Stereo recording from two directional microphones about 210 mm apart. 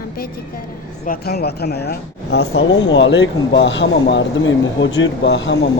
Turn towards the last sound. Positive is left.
turn(degrees=60)  # may be behind; listen again after turning